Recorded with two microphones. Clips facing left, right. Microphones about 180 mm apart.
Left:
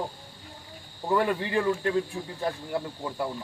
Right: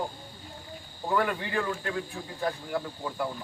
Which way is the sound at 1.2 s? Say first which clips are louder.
Left 3 dB; 25° left (ahead or behind).